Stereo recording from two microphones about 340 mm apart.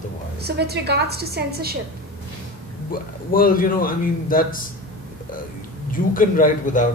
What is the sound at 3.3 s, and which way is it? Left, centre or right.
A man's voice, left.